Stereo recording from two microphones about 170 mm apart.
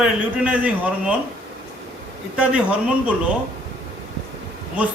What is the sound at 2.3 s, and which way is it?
Speech, 5° right (ahead or behind).